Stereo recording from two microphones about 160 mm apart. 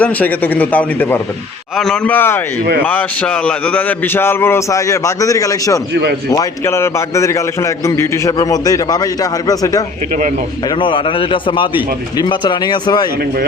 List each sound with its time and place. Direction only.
0.0 s a man's voice: 10° left (ahead or behind)
10.8 s a man's voice: 30° left (ahead or behind)